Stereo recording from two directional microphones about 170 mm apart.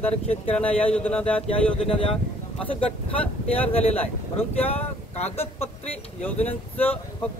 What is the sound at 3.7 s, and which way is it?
Speech, 35° left (ahead or behind).